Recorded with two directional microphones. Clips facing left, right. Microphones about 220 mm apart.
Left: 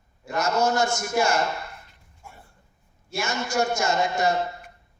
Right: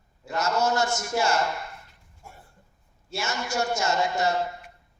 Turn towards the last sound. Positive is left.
turn(degrees=15)  # may be behind; listen again after turning